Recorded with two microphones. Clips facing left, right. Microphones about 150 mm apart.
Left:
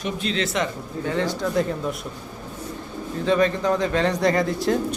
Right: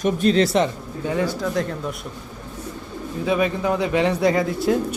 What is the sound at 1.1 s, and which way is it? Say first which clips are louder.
Speech: right 2 dB; 10° right (ahead or behind).